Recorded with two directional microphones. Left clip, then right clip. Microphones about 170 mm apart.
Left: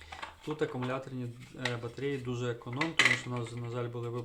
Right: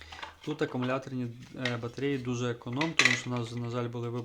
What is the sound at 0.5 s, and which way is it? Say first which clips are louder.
Speech: right 3 dB; 30° right (ahead or behind).